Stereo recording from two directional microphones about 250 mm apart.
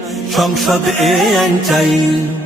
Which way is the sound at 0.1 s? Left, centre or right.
Centre.